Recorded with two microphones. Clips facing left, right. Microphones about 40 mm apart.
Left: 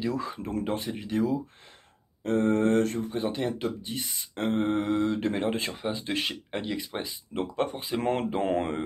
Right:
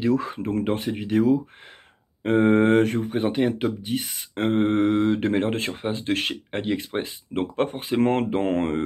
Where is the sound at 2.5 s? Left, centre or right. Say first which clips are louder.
Right 5 dB; right.